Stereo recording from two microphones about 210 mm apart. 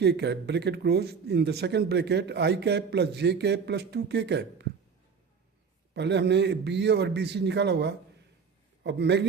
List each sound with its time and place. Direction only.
0.0 s speech: 55° right (ahead or behind)
5.9 s a man's voice: 55° right (ahead or behind)